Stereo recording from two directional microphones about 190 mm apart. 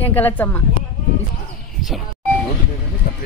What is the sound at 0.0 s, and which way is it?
Speech, 10° left (ahead or behind).